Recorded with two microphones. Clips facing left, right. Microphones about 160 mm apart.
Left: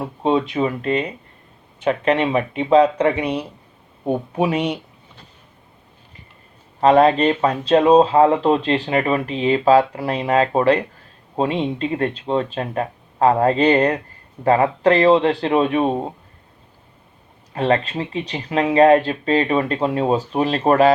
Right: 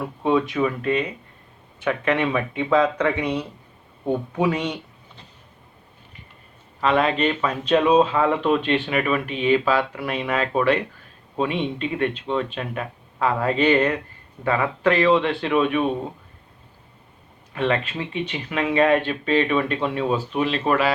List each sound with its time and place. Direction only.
0.0 s speech: 25° left (ahead or behind)
6.7 s speech: 40° left (ahead or behind)
17.5 s speech: 35° left (ahead or behind)